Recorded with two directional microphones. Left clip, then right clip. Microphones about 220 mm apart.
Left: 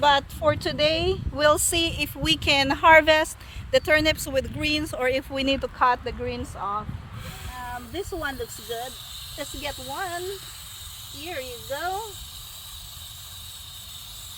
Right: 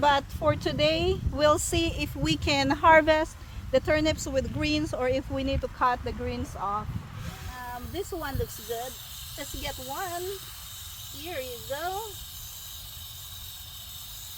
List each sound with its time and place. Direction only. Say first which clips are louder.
0.0 s speech: left 3 dB; 45° left (ahead or behind)
6.6 s speech: left 1 dB; 20° left (ahead or behind)
7.6 s speech: left 2 dB; 5° left (ahead or behind)